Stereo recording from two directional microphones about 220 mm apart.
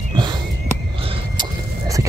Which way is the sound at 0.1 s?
20° right (ahead or behind).